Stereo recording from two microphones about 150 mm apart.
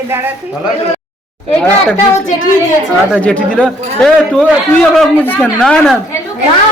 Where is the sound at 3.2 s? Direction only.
10° left (ahead or behind).